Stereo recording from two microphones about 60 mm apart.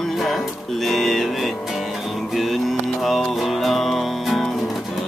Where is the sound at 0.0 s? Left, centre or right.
Centre.